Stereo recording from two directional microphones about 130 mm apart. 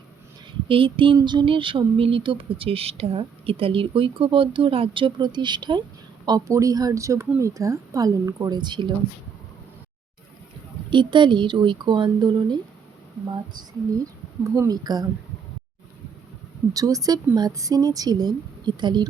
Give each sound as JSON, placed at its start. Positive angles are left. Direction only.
{"t": 0.7, "sound": "a sound", "side_deg": -40}
{"t": 6.2, "sound": "a woman's voice", "side_deg": -30}
{"t": 10.8, "sound": "a woman's voice", "side_deg": -35}
{"t": 14.4, "sound": "a woman's voice", "side_deg": -25}
{"t": 16.7, "sound": "a woman's voice", "side_deg": -25}